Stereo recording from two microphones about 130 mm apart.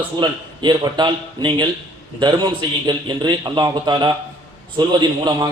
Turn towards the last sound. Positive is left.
turn(degrees=-35)  # may be behind; listen again after turning